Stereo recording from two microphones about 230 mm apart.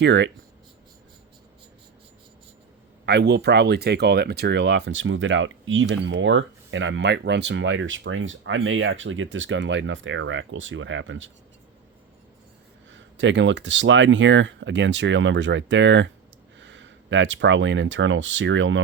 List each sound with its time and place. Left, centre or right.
0.0 s speech: right
3.1 s speech: right
12.9 s speech: right